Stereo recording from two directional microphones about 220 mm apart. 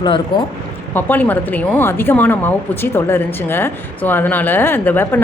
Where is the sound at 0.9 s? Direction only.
10° left (ahead or behind).